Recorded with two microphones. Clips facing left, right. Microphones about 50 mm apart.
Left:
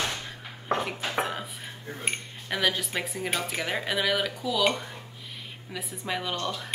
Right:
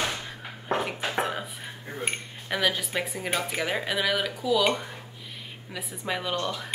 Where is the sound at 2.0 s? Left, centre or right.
Centre.